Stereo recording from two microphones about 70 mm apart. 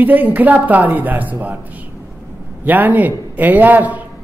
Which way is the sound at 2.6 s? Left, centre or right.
Right.